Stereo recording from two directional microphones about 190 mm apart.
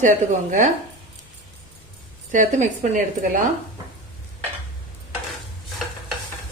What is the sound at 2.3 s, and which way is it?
Speech, 40° right (ahead or behind).